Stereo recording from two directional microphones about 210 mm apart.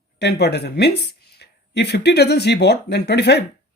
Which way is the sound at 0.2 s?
55° left (ahead or behind).